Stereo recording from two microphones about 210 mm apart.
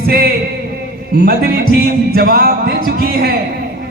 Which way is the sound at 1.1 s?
45° right (ahead or behind).